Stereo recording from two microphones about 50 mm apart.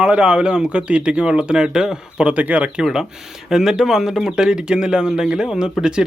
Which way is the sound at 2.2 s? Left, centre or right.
Right.